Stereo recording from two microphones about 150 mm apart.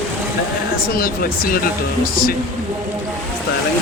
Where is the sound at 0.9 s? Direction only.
80° left.